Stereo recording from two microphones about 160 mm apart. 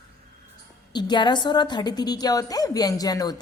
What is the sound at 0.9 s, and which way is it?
A woman's voice, 30° left (ahead or behind).